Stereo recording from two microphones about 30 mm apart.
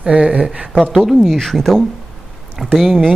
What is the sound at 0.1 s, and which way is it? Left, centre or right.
Speech, right.